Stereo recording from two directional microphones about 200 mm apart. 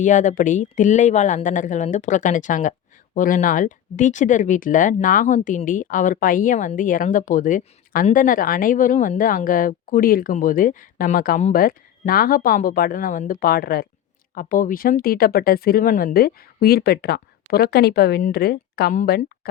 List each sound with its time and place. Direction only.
0.0 s speech: 40° left (ahead or behind)